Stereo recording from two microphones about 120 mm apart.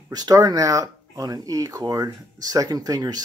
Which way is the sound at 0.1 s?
30° right (ahead or behind).